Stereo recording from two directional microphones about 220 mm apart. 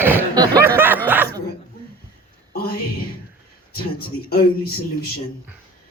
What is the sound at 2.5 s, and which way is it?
Speech, 45° left (ahead or behind).